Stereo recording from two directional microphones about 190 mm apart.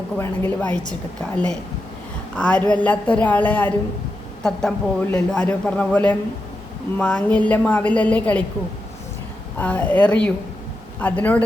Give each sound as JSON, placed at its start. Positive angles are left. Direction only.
{"t": 0.2, "sound": "a woman's voice", "side_deg": 10}
{"t": 2.3, "sound": "a woman's voice", "side_deg": 5}
{"t": 9.6, "sound": "a woman's voice", "side_deg": 10}